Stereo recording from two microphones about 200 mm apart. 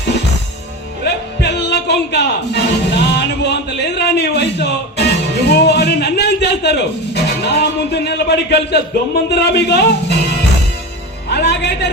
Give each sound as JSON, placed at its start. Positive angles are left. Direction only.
{"t": 1.0, "sound": "music", "side_deg": 60}
{"t": 9.3, "sound": "speech", "side_deg": 60}
{"t": 11.3, "sound": "music", "side_deg": 55}